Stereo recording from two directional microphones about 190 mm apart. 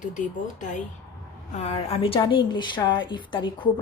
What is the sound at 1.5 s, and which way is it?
A woman's voice, 35° left (ahead or behind).